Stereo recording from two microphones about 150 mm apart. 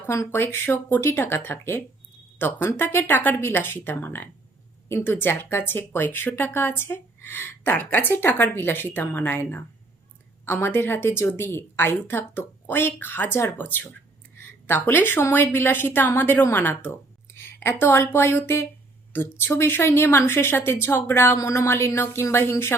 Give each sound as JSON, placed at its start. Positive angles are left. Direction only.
{"t": 0.0, "sound": "speech", "side_deg": 15}